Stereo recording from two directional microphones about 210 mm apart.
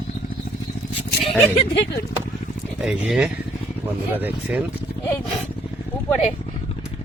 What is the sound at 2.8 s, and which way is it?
Speech, 5° right (ahead or behind).